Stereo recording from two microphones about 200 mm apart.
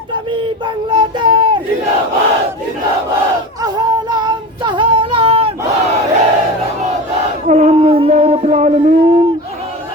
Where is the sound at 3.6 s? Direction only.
20° right (ahead or behind).